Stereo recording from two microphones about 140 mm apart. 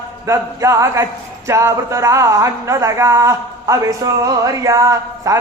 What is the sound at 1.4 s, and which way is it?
Speech, 20° right (ahead or behind).